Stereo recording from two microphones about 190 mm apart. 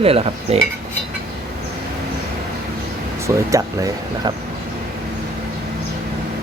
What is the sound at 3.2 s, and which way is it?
Speech, 15° right (ahead or behind).